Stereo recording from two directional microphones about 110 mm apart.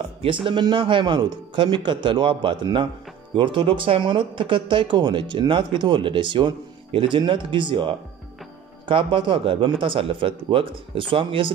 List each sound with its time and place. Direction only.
0.2 s speech: 50° right (ahead or behind)